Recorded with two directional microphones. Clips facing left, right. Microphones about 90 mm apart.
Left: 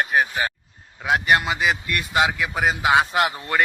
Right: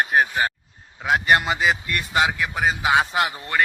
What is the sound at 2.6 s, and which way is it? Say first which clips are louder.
Speech: left 1 dB; 15° left (ahead or behind).